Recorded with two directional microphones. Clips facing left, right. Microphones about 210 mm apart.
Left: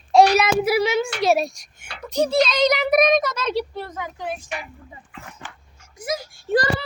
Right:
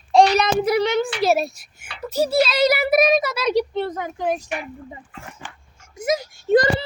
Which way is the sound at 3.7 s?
25° right (ahead or behind).